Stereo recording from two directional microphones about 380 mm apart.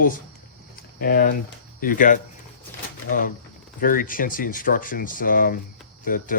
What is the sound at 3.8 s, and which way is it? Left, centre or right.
Speech, left.